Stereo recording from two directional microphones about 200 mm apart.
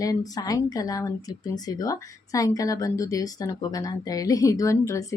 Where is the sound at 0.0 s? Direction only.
20° left (ahead or behind).